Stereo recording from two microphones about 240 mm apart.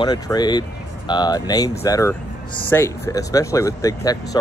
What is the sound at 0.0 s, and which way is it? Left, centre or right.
Speech, centre.